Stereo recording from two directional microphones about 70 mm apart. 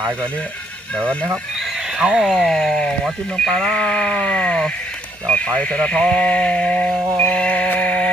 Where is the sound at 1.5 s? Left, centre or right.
Centre.